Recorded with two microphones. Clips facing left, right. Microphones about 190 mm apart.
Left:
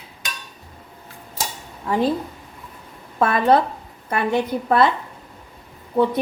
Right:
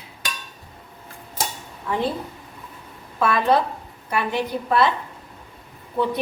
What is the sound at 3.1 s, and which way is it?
A woman's voice, 45° left (ahead or behind).